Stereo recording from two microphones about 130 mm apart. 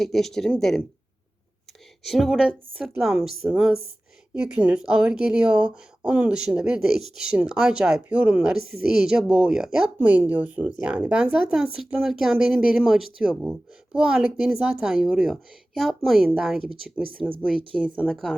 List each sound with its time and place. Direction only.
0.0 s speech: centre (ahead or behind)
2.0 s speech: centre (ahead or behind)